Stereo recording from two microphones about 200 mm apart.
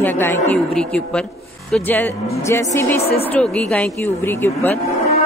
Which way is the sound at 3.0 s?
30° left (ahead or behind).